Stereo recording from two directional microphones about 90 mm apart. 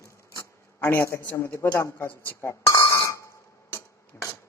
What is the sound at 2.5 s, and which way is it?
Chink, 35° left (ahead or behind).